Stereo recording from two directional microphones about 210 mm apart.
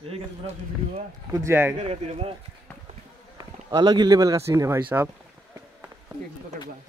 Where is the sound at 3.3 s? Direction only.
20° right (ahead or behind).